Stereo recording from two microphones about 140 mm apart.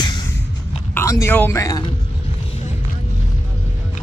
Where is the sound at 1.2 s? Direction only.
15° left (ahead or behind).